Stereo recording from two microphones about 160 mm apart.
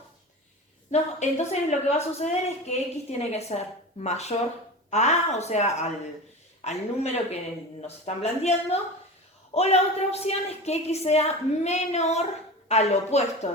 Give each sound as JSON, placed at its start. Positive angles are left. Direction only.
{"t": 0.9, "sound": "a woman's voice", "side_deg": 45}